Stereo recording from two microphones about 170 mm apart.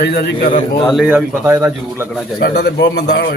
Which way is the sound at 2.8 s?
90° left.